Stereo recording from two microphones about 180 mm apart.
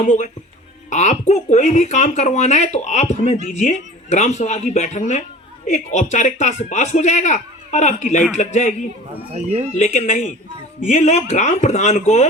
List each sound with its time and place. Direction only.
0.0 s speech: 45° left (ahead or behind)
9.3 s speech: 40° right (ahead or behind)
9.7 s speech: 40° left (ahead or behind)